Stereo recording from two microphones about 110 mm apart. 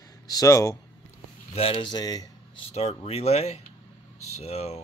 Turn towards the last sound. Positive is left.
turn(degrees=75)  # may be behind; listen again after turning